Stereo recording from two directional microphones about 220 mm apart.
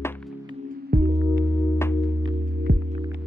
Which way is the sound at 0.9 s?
45° right (ahead or behind).